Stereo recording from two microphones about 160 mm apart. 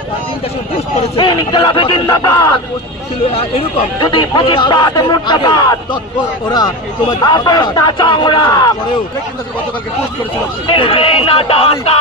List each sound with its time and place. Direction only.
1.1 s speech: 30° left (ahead or behind)
3.3 s speech: 35° left (ahead or behind)
10.7 s speech: 35° left (ahead or behind)